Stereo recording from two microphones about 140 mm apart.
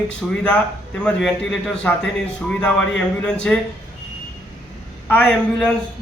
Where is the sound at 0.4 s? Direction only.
10° left (ahead or behind).